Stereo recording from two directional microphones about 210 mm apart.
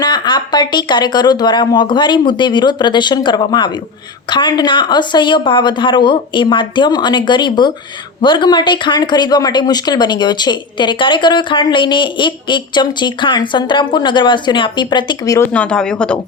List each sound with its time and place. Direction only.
0.0 s speech: 20° left (ahead or behind); by 16.1 s 5° left (ahead or behind)